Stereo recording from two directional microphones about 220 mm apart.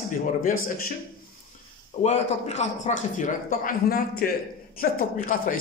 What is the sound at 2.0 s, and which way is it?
A man's voice, 30° left (ahead or behind).